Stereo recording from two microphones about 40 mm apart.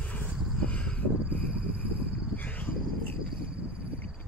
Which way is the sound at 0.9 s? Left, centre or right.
Left.